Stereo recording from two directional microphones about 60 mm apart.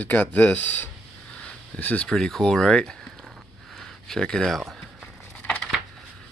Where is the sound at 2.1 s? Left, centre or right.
Centre.